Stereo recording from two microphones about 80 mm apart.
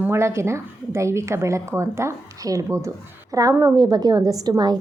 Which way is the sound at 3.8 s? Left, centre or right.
Right.